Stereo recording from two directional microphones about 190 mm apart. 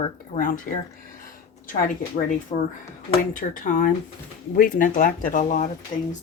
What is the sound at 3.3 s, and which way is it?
Speech, 45° left (ahead or behind).